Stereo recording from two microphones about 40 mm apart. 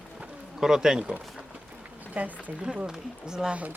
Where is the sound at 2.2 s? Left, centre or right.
Right.